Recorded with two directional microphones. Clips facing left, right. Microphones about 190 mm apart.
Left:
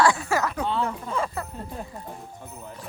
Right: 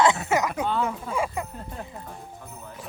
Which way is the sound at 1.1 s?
15° right (ahead or behind).